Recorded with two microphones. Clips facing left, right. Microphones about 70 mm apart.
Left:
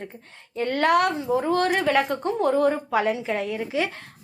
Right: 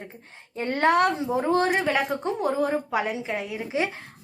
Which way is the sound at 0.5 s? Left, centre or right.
Right.